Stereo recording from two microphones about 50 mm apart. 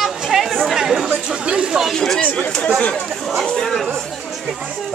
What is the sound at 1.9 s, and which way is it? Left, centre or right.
Speech, centre.